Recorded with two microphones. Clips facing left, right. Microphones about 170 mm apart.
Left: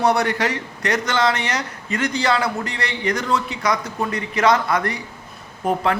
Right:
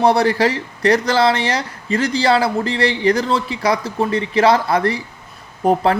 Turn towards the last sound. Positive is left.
turn(degrees=-35)  # may be behind; listen again after turning